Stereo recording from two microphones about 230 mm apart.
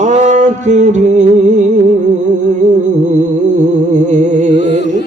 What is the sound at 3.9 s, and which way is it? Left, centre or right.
Music, right.